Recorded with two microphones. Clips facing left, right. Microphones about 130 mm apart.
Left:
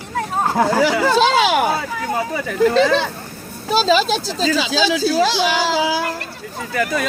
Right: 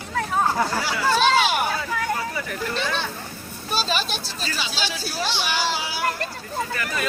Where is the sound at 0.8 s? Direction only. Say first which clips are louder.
Left 7 dB; 90° left.